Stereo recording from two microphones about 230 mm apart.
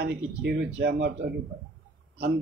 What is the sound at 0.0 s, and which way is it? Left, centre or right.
Speech, right.